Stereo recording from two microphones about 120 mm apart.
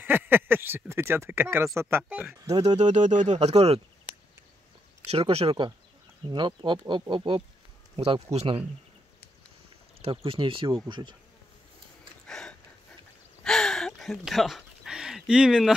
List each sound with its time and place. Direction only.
0.0 s speech: 15° right (ahead or behind)
2.0 s speech: 10° right (ahead or behind)
2.6 s speech: 70° right (ahead or behind)
5.3 s speech: 50° right (ahead or behind)
6.3 s speech: 40° right (ahead or behind)
7.9 s speech: 55° right (ahead or behind)
10.0 s speech: 50° right (ahead or behind)
12.3 s a sound: 5° left (ahead or behind)